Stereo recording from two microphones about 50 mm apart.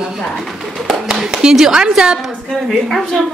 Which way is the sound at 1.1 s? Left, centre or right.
Centre.